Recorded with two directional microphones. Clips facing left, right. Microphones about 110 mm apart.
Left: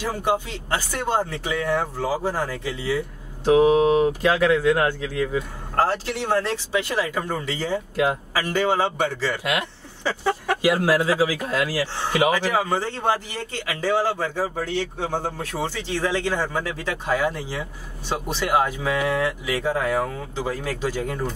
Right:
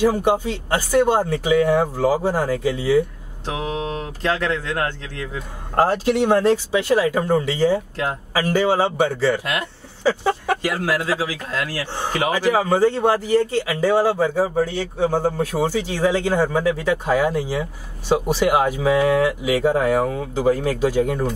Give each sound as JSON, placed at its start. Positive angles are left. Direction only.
{"t": 0.0, "sound": "speech", "side_deg": -15}
{"t": 3.5, "sound": "speech", "side_deg": 10}
{"t": 5.8, "sound": "speech", "side_deg": -15}
{"t": 7.9, "sound": "speech", "side_deg": 10}
{"t": 8.3, "sound": "speech", "side_deg": -10}
{"t": 10.6, "sound": "speech", "side_deg": 15}
{"t": 12.4, "sound": "speech", "side_deg": -10}